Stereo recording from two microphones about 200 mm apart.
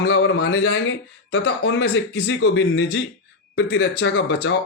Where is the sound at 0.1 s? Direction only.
80° left.